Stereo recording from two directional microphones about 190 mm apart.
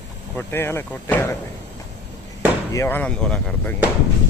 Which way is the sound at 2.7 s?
15° left (ahead or behind).